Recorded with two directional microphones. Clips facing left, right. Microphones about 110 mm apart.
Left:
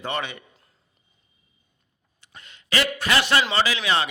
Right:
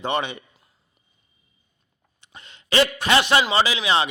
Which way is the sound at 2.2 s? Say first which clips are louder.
Right 2 dB; 25° right (ahead or behind).